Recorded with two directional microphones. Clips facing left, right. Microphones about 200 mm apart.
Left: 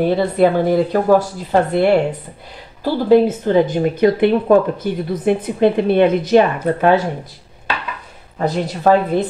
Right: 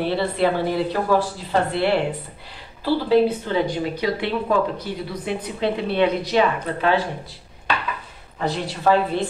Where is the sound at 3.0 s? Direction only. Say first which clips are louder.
Left 7 dB; 45° left (ahead or behind).